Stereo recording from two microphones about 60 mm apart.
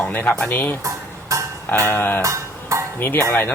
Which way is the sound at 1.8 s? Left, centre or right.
Left.